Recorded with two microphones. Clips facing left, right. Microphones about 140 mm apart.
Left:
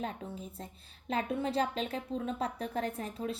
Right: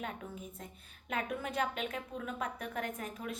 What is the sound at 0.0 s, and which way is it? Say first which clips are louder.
A woman's voice: left 3 dB; 30° left (ahead or behind).